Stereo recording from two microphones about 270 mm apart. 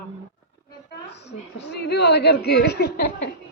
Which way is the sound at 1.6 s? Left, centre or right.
Left.